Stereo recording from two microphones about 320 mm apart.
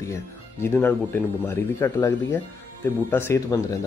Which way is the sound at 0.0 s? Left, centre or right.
Centre.